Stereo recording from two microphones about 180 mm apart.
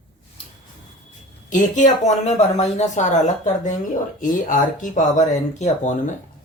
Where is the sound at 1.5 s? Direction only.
45° left (ahead or behind).